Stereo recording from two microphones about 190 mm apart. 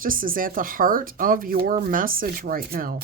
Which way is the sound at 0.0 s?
50° right (ahead or behind).